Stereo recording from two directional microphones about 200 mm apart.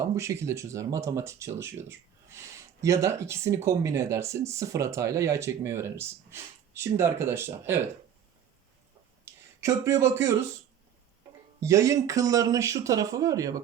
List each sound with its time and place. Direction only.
0.0 s speech: 15° right (ahead or behind)
9.6 s speech: 15° right (ahead or behind)
11.6 s speech: 15° right (ahead or behind)